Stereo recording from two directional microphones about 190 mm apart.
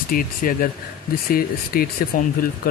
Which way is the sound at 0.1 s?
50° left (ahead or behind).